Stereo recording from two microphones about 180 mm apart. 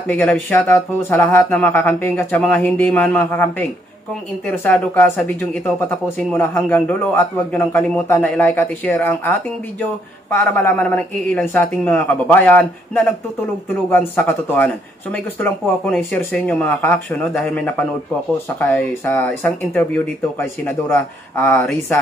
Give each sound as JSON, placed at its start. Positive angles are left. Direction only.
{"t": 0.0, "sound": "speech", "side_deg": 10}
{"t": 10.3, "sound": "speech", "side_deg": 10}